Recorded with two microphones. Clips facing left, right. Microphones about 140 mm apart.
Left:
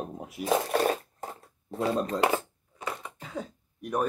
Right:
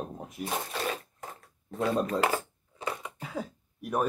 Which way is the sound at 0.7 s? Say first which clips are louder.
Left 10 dB; 55° left (ahead or behind).